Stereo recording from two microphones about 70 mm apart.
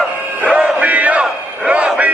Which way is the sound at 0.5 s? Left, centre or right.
Centre.